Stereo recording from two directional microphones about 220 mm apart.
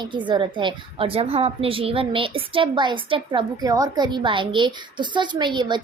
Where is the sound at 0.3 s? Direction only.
20° right (ahead or behind).